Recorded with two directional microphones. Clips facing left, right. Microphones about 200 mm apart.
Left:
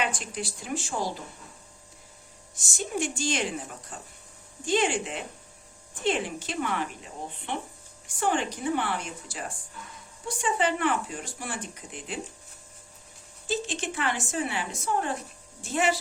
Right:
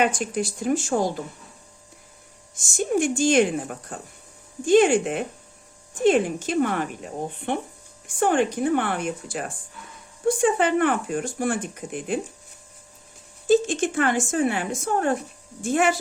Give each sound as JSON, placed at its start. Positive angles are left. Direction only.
{"t": 0.0, "sound": "speech", "side_deg": -45}
{"t": 2.6, "sound": "speech", "side_deg": -50}
{"t": 13.5, "sound": "speech", "side_deg": -45}